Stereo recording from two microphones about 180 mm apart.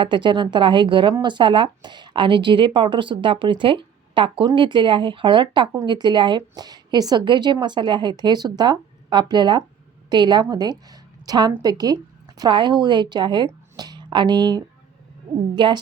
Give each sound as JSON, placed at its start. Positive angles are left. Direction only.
{"t": 0.0, "sound": "a woman's voice", "side_deg": -25}